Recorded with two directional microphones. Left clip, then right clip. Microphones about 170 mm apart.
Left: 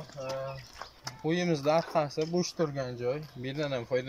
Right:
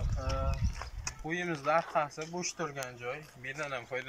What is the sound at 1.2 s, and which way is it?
Speech, 30° left (ahead or behind).